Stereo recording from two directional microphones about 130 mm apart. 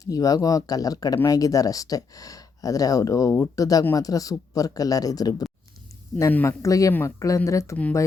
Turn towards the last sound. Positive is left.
turn(degrees=20)  # may be behind; listen again after turning